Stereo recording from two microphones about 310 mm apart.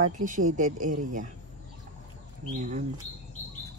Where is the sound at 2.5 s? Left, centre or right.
Right.